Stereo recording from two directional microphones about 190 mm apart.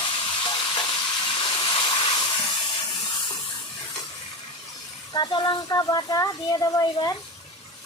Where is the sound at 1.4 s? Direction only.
25° left (ahead or behind).